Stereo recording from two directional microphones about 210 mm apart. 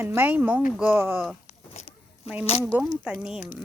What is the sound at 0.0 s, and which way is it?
Speech, 10° right (ahead or behind).